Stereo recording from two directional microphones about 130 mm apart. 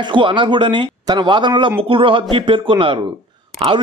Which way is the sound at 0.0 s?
40° right (ahead or behind).